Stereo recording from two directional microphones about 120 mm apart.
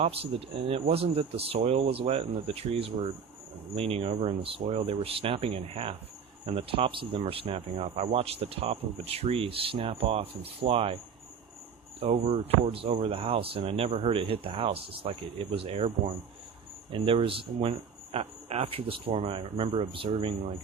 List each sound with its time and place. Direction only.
0.0 s speech: 55° right (ahead or behind)